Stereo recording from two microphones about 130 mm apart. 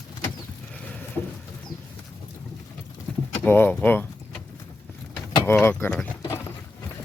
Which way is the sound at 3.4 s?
15° left (ahead or behind).